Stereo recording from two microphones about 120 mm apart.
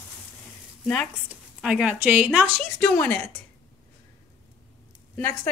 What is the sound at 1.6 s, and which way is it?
Speech, 5° right (ahead or behind).